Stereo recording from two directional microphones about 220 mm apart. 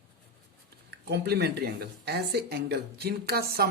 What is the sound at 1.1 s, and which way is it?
Speech, 50° right (ahead or behind).